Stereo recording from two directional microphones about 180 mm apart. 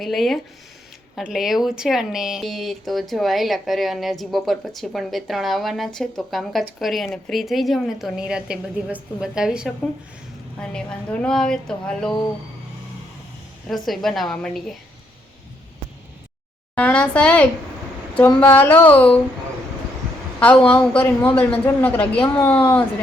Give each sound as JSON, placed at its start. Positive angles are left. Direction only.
{"t": 0.0, "sound": "a woman's voice", "side_deg": 0}
{"t": 13.7, "sound": "a woman's voice", "side_deg": 0}
{"t": 16.7, "sound": "a man's voice", "side_deg": 5}
{"t": 20.4, "sound": "a man's voice", "side_deg": 10}